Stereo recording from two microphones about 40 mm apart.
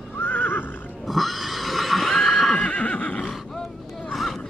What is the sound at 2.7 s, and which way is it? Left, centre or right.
Neigh, left.